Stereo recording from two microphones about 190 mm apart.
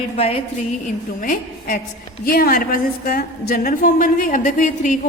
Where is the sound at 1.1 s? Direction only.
45° left (ahead or behind).